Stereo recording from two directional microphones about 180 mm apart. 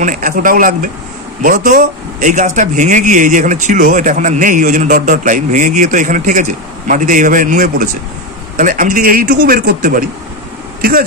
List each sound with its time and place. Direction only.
0.0 s speech: 50° right (ahead or behind)